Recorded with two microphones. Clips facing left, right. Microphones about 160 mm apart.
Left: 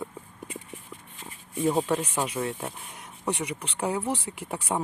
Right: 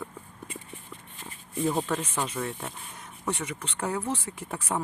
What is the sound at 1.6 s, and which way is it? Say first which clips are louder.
Speech: left 3 dB; 10° left (ahead or behind).